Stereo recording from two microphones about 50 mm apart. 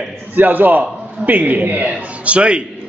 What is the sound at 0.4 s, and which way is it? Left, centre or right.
A man's voice, right.